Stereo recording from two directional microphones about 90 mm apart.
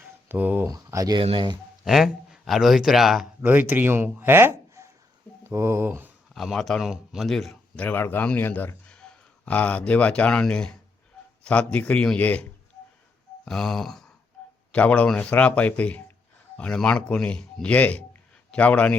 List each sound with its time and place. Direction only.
0.0 s a sound: 20° right (ahead or behind)
0.6 s speech: 35° right (ahead or behind)
1.2 s speech: 90° right
1.8 s speech: 5° right (ahead or behind)
3.4 s speech: 20° right (ahead or behind)
6.3 s speech: centre (ahead or behind)
7.8 s a man's voice: 20° left (ahead or behind)
13.4 s speech: 5° left (ahead or behind)